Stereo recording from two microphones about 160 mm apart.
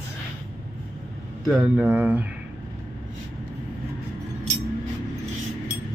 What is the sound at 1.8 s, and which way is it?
Speech, 10° right (ahead or behind).